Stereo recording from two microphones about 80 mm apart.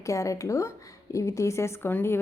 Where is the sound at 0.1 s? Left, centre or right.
Left.